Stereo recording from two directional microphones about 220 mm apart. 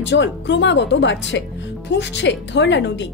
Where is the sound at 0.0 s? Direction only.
50° left (ahead or behind).